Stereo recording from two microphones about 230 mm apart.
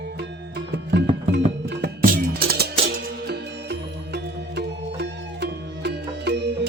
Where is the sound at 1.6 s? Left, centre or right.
Right.